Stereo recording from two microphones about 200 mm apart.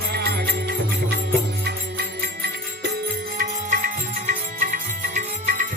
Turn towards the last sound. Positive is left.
turn(degrees=-40)  # may be behind; listen again after turning